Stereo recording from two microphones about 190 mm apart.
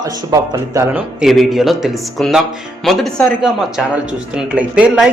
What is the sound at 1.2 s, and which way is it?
Speech, centre (ahead or behind).